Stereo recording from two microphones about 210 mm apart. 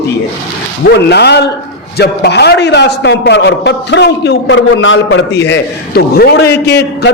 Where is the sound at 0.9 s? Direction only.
50° left (ahead or behind).